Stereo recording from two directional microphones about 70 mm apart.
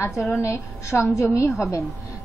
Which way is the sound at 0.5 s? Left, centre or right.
Left.